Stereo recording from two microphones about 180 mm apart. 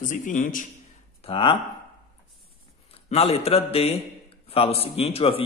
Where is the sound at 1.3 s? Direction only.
30° left (ahead or behind).